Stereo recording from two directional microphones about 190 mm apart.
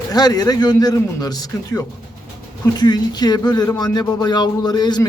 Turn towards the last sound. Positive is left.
turn(degrees=20)  # may be behind; listen again after turning